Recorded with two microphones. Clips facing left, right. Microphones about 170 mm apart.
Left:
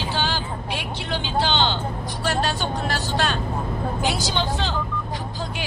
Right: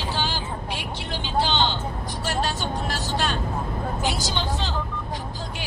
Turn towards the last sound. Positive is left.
turn(degrees=70)  # may be behind; listen again after turning